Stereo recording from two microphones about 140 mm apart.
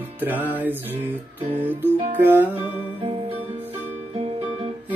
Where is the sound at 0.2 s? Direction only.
15° right (ahead or behind).